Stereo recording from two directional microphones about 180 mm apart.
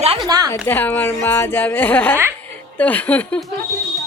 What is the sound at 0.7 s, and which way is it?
A woman's voice, 10° left (ahead or behind).